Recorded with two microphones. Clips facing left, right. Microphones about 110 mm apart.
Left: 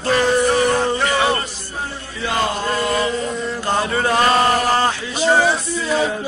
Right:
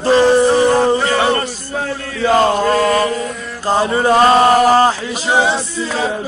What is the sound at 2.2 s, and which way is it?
Chant, 45° right (ahead or behind).